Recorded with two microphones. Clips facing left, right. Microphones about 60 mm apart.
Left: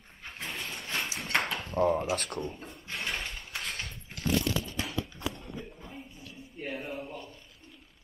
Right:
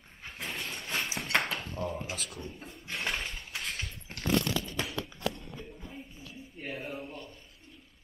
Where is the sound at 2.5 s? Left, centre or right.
Centre.